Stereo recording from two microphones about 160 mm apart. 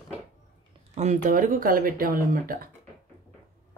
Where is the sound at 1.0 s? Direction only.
50° right (ahead or behind).